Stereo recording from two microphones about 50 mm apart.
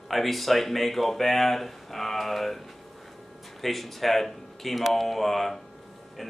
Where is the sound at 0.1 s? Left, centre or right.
Centre.